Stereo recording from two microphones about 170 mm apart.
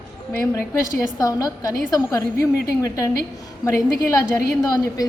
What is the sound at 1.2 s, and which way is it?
A woman's voice, 20° left (ahead or behind).